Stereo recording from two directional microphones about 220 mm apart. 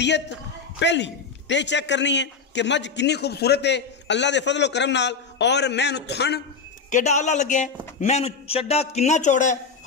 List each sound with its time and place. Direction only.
0.7 s a man's voice: 55° left (ahead or behind)
6.9 s a man's voice: 35° left (ahead or behind)